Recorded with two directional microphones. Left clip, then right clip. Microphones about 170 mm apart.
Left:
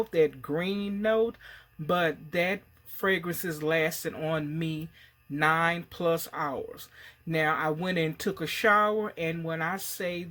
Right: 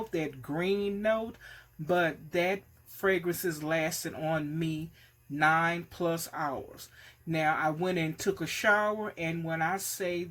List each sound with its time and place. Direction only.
0.1 s speech: 25° left (ahead or behind)